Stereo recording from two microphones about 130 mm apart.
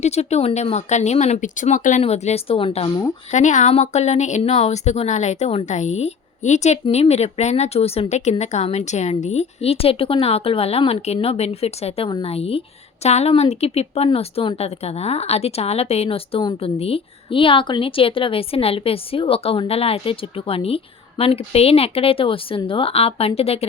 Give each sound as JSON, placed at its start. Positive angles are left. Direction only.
{"t": 0.0, "sound": "speech", "side_deg": 55}
{"t": 2.0, "sound": "a woman's voice", "side_deg": 55}
{"t": 3.3, "sound": "a woman's voice", "side_deg": 70}